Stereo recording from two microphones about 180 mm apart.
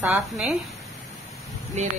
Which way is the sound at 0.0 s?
5° right (ahead or behind).